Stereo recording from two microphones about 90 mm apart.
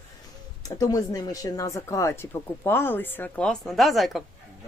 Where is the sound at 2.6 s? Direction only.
25° left (ahead or behind); by 4.2 s centre (ahead or behind).